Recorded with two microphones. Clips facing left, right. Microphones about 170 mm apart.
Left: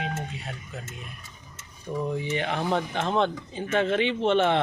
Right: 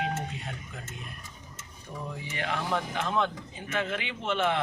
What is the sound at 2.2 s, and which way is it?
Speech, 25° left (ahead or behind).